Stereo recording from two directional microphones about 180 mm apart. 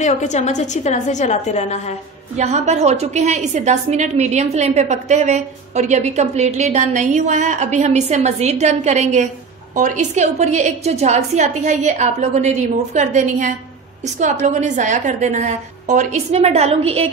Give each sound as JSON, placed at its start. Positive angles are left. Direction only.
{"t": 0.0, "sound": "a woman's voice", "side_deg": 40}
{"t": 2.3, "sound": "a woman's voice", "side_deg": -40}